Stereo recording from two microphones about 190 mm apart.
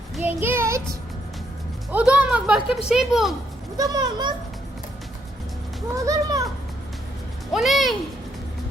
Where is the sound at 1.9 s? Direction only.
5° right (ahead or behind).